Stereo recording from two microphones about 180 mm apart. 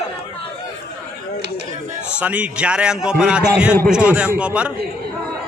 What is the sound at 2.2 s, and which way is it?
A man's voice, 5° right (ahead or behind).